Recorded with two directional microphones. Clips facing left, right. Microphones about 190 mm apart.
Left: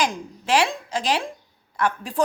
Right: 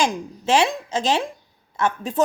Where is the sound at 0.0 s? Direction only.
25° right (ahead or behind).